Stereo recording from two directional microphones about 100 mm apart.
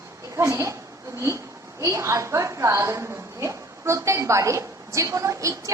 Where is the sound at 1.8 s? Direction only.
30° right (ahead or behind).